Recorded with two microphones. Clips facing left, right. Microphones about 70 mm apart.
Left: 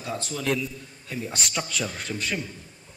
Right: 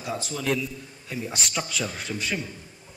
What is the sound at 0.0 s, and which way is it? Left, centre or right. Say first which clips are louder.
Speech: even; centre.